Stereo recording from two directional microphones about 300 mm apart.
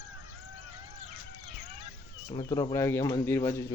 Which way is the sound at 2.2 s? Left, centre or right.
Centre.